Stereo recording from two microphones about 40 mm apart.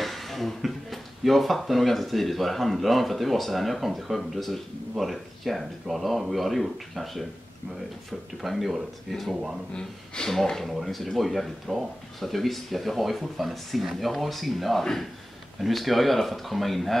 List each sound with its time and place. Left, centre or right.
0.0 s a sound: centre
1.2 s speech: centre
8.4 s a man's voice: centre
9.8 s speech: centre
10.6 s speech: centre